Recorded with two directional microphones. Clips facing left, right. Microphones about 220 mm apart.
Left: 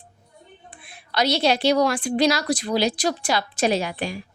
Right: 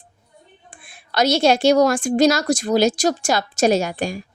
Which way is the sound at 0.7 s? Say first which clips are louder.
Right 2 dB; 50° right (ahead or behind).